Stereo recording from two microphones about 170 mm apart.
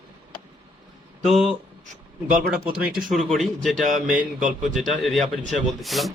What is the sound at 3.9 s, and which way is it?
Speech, 50° right (ahead or behind).